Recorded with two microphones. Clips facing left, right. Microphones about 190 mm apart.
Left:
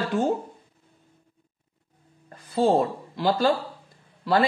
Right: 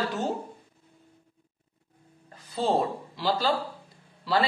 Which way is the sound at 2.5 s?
50° left (ahead or behind).